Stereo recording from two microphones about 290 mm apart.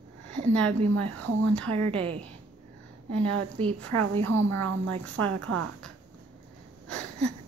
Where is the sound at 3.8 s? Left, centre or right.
Right.